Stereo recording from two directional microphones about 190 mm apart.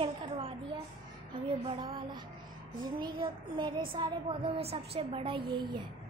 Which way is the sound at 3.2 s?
25° right (ahead or behind).